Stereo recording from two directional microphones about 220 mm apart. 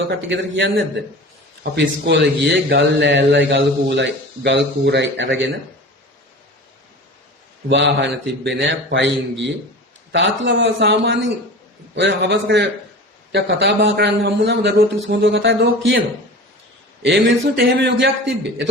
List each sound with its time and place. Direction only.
0.3 s a man's voice: 55° right (ahead or behind)
7.7 s a man's voice: 50° right (ahead or behind)